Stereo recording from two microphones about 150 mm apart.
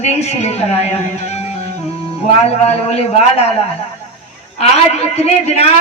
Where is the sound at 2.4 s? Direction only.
45° left (ahead or behind).